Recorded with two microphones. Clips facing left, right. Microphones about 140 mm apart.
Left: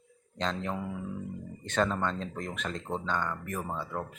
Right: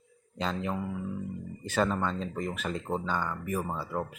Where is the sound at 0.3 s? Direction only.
5° right (ahead or behind).